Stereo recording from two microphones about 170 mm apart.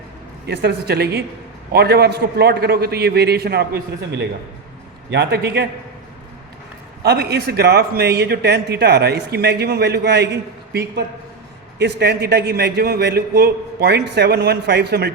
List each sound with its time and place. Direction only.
0.4 s a man's voice: 70° right (ahead or behind)
7.0 s a man's voice: 70° right (ahead or behind)